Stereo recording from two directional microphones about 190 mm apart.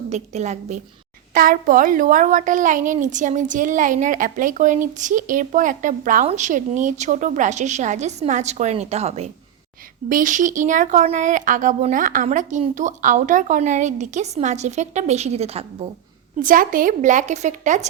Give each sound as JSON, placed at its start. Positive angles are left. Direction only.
{"t": 0.1, "sound": "speech", "side_deg": -35}
{"t": 1.3, "sound": "a woman's voice", "side_deg": -45}
{"t": 16.4, "sound": "speech", "side_deg": -45}